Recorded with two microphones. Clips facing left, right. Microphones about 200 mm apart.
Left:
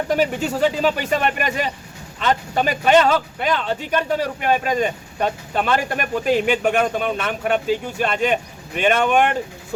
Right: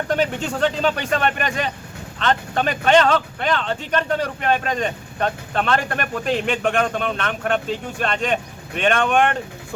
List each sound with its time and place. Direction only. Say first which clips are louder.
0.1 s speech: left 2 dB; 5° left (ahead or behind)